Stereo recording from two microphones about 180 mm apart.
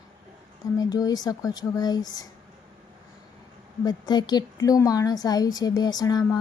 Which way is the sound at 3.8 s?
20° left (ahead or behind).